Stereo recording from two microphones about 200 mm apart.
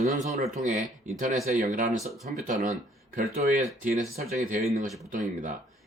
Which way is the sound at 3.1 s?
45° right (ahead or behind).